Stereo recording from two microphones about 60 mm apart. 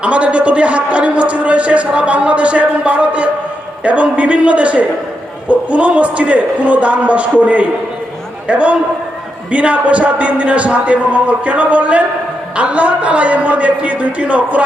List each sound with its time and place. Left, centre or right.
0.0 s a man's voice: right